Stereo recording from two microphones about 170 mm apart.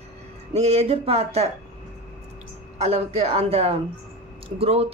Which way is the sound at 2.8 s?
35° right (ahead or behind).